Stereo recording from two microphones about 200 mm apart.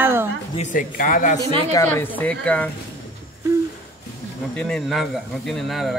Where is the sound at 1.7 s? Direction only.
10° left (ahead or behind).